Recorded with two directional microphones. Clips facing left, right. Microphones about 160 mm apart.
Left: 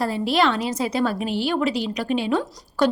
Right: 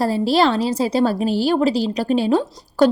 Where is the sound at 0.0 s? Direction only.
35° right (ahead or behind).